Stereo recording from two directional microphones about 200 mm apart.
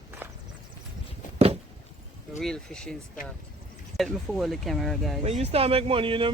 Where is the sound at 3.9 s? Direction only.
Centre (ahead or behind).